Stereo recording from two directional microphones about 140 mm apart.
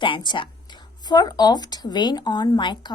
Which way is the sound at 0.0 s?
35° left (ahead or behind).